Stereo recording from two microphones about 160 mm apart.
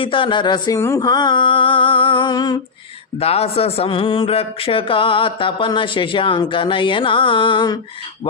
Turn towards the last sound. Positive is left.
turn(degrees=30)  # may be behind; listen again after turning